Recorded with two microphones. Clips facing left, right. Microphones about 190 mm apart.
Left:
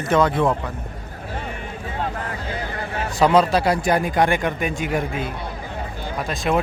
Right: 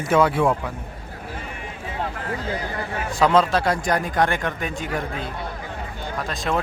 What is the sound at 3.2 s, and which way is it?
Speech, 5° left (ahead or behind).